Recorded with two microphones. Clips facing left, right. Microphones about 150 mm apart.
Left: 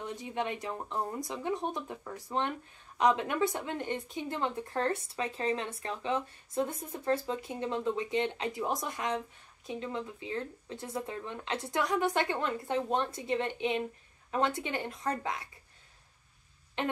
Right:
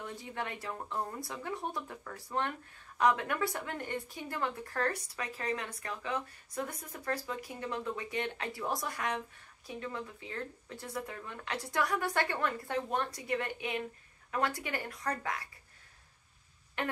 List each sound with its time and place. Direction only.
0.0 s a woman's voice: 20° left (ahead or behind)
16.8 s a woman's voice: 20° left (ahead or behind)